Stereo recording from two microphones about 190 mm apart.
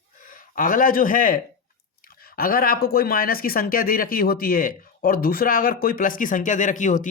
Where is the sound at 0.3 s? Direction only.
45° left (ahead or behind).